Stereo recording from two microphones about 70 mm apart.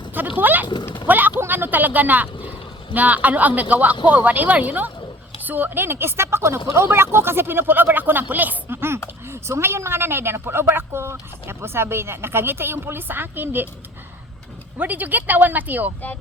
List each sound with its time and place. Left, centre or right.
0.1 s speech: right
1.0 s a sound: right
1.4 s a woman's voice: right
14.8 s speech: right